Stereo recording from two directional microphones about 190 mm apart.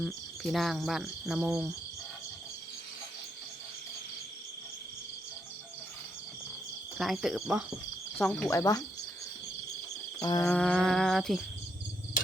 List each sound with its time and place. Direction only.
0.0 s cricket: centre (ahead or behind)
7.0 s cricket: centre (ahead or behind)
8.2 s speech: 10° left (ahead or behind)
10.2 s a sound: 20° left (ahead or behind)
10.4 s cricket: 5° left (ahead or behind)